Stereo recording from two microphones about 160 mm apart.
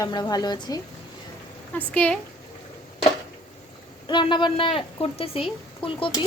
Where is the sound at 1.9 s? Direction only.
5° left (ahead or behind).